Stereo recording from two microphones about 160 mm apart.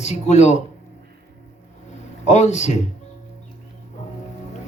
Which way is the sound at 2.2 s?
45° left (ahead or behind).